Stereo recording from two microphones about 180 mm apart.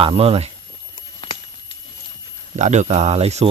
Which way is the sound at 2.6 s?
40° right (ahead or behind).